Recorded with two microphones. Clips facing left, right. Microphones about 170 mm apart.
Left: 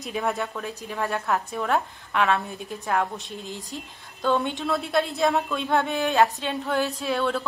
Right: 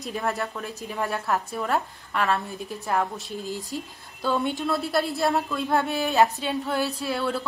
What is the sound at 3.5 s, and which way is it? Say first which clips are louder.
Speech: right 5 dB; 40° right (ahead or behind).